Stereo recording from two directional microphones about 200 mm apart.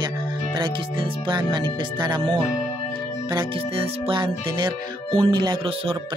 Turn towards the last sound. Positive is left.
turn(degrees=-20)  # may be behind; listen again after turning